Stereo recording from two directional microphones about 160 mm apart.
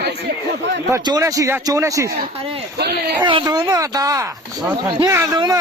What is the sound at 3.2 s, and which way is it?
A man's voice, 30° right (ahead or behind).